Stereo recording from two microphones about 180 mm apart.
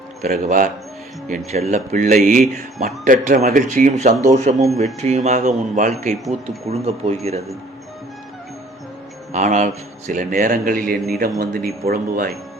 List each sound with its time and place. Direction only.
0.2 s a man's voice: 45° right (ahead or behind)
1.5 s a man's voice: 40° right (ahead or behind)
9.3 s a man's voice: 40° right (ahead or behind)